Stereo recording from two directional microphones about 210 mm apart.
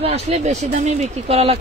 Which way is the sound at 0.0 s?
30° right (ahead or behind).